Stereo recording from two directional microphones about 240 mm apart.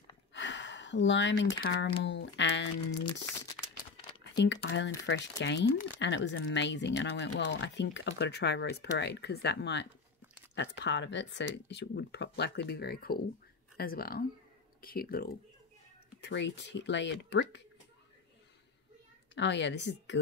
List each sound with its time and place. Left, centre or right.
0.3 s a sound: left
1.6 s speech: left
4.2 s speech: left
16.2 s speech: left
19.3 s speech: left